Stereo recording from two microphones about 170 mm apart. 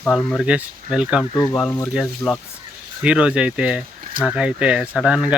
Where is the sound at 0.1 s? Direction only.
Centre (ahead or behind).